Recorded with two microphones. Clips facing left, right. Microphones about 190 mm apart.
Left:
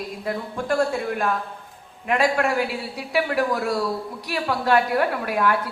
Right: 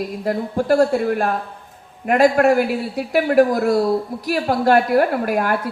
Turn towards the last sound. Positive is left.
turn(degrees=-45)  # may be behind; listen again after turning